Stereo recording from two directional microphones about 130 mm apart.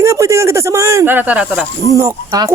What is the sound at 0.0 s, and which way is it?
Speech, 20° right (ahead or behind).